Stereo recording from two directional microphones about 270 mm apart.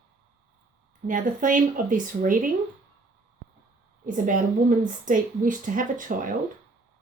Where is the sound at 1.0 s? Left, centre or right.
Right.